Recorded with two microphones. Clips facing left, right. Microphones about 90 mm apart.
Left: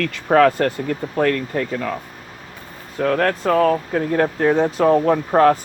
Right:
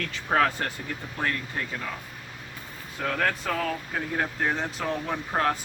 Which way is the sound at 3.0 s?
65° left (ahead or behind).